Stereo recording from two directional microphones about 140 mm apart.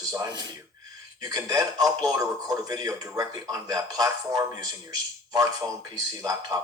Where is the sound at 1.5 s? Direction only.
25° right (ahead or behind).